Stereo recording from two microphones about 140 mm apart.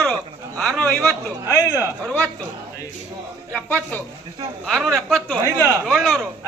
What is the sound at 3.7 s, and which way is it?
Speech, 10° left (ahead or behind).